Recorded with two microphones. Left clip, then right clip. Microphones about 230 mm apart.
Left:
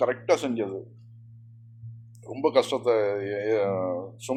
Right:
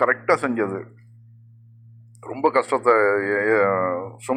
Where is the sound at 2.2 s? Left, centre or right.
Right.